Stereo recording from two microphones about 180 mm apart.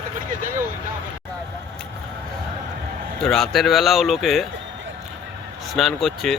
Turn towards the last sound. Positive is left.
turn(degrees=0)  # may be behind; listen again after turning